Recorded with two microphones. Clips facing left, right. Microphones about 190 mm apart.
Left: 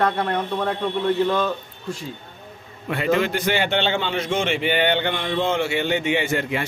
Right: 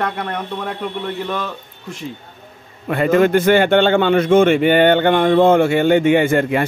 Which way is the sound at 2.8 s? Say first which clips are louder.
Right 7 dB; 50° right (ahead or behind).